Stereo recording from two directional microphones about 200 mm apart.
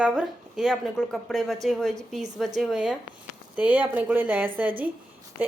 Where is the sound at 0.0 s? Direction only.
5° right (ahead or behind).